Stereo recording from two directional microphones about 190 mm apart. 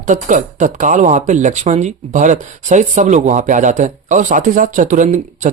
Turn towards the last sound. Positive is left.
turn(degrees=-40)  # may be behind; listen again after turning